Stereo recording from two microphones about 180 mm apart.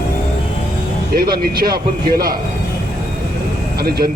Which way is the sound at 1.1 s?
55° right (ahead or behind).